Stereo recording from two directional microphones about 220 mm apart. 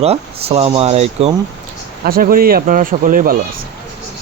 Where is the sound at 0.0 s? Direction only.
30° right (ahead or behind).